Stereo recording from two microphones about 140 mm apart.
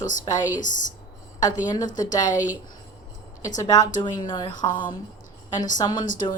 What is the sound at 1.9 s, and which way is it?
Speech, 30° left (ahead or behind).